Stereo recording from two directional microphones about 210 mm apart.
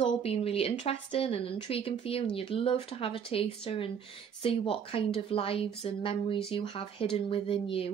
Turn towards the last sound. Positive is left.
turn(degrees=25)  # may be behind; listen again after turning